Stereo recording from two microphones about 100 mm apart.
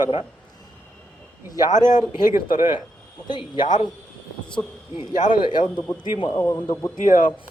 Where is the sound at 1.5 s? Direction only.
45° left (ahead or behind).